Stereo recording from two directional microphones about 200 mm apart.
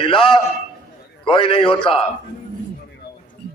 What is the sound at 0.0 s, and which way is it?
A man's voice, 25° left (ahead or behind).